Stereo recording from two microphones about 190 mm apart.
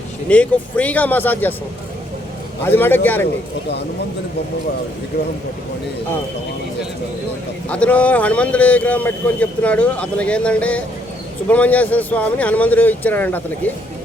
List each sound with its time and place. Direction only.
0.3 s speech: 5° left (ahead or behind)
2.6 s speech: 10° left (ahead or behind)
7.7 s speech: 5° left (ahead or behind)